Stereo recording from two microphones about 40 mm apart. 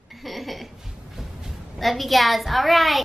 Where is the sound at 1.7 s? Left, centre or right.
Centre.